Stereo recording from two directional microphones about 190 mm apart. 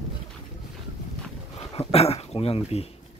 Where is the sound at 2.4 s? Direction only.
30° left (ahead or behind).